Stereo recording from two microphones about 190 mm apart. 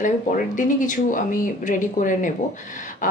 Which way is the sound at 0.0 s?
45° left (ahead or behind).